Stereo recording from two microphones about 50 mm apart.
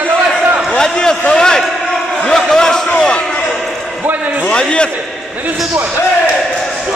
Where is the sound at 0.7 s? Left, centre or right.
Centre.